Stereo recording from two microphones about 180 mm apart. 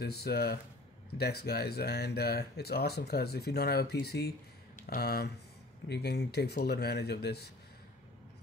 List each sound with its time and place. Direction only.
0.0 s speech: 65° left (ahead or behind)